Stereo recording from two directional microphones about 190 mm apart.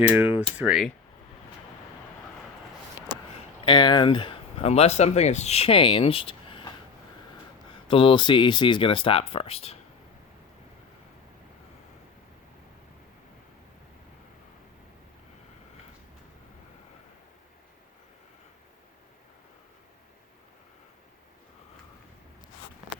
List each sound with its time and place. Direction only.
0.1 s speech: 5° right (ahead or behind)
3.7 s speech: 25° left (ahead or behind)
7.9 s speech: 25° left (ahead or behind)